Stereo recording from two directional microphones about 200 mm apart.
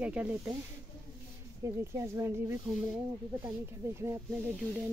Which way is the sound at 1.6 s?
15° right (ahead or behind).